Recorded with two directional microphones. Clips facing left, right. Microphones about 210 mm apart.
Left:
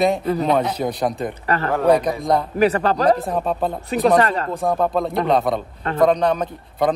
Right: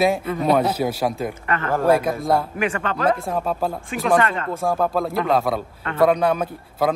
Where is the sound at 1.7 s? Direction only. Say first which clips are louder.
Left 1 dB; centre (ahead or behind).